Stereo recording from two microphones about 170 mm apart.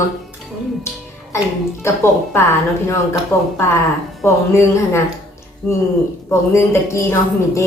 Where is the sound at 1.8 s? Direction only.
15° left (ahead or behind).